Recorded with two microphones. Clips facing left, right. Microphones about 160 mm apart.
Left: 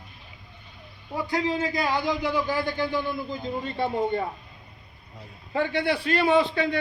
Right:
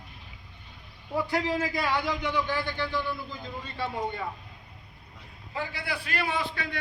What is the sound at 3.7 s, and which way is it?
Speech, 55° left (ahead or behind).